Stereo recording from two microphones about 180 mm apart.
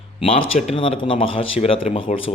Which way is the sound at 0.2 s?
30° left (ahead or behind).